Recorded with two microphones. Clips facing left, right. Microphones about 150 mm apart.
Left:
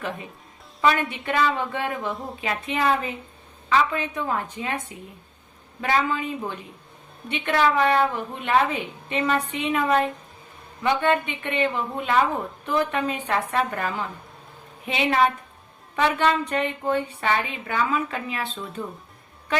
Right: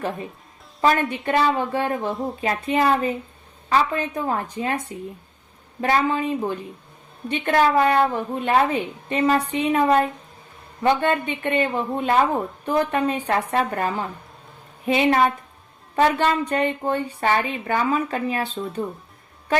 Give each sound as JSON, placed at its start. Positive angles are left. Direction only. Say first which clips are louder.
{"t": 0.8, "sound": "a woman's voice", "louder": "right 2 dB", "side_deg": -35}